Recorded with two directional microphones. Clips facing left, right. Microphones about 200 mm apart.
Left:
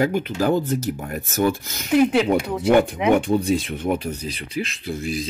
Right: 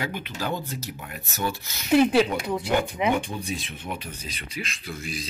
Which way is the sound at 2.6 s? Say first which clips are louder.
Left 8 dB; 70° left (ahead or behind).